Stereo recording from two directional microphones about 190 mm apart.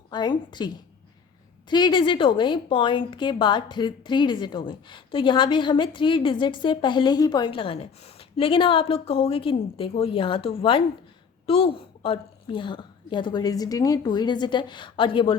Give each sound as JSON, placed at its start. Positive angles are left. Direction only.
{"t": 0.1, "sound": "a woman's voice", "side_deg": 20}
{"t": 1.7, "sound": "a woman's voice", "side_deg": 25}